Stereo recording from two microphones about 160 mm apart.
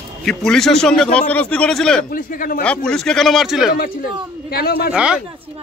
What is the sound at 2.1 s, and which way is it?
Speech, 60° left (ahead or behind).